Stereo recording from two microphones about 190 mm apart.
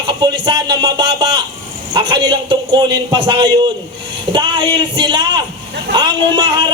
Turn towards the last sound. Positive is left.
turn(degrees=-25)  # may be behind; listen again after turning